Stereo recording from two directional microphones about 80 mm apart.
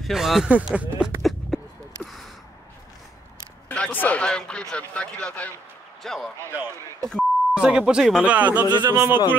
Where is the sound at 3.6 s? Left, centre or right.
Centre.